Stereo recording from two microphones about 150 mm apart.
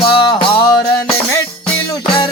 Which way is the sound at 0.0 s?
35° left (ahead or behind).